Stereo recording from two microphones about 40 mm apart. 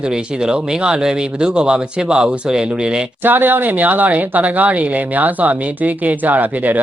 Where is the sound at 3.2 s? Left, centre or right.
Right.